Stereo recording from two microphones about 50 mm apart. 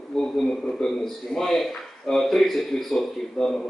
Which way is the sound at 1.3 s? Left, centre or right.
Centre.